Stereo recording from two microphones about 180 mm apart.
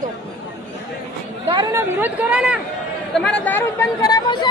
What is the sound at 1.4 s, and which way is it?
Speech, 25° right (ahead or behind).